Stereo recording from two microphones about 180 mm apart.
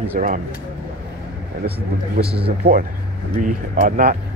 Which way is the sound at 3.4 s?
45° right (ahead or behind).